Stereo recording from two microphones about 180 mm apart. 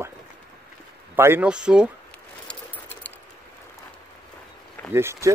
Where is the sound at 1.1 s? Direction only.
10° right (ahead or behind).